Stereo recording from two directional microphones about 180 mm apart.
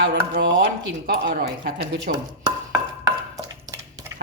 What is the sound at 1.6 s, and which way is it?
Speech, 55° right (ahead or behind).